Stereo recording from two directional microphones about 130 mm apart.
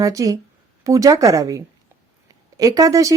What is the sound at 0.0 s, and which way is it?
Speech, 25° right (ahead or behind).